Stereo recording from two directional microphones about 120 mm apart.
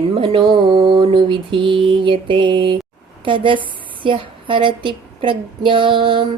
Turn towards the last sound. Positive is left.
turn(degrees=-45)  # may be behind; listen again after turning